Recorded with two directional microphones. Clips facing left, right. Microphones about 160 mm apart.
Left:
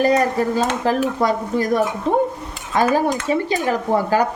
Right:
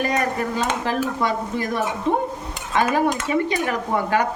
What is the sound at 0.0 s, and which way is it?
Speech, 35° left (ahead or behind).